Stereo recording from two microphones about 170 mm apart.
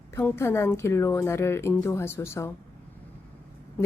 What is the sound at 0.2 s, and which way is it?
Speech, 15° left (ahead or behind).